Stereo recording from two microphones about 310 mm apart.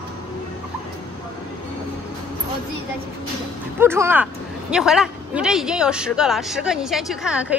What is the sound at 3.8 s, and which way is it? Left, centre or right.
Speech, centre.